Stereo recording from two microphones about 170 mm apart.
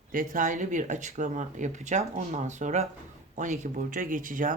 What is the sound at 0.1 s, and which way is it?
Speech, 50° right (ahead or behind).